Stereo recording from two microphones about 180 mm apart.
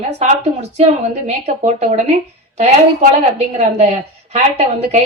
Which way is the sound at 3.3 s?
35° right (ahead or behind).